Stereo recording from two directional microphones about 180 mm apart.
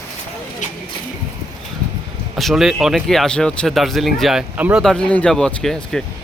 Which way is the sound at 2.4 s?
Centre (ahead or behind).